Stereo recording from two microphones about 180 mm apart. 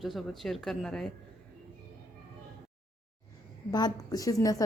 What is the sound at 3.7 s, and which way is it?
Speech, 20° left (ahead or behind).